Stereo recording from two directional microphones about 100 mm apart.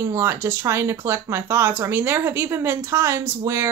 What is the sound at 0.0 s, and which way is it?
Speech, 25° right (ahead or behind).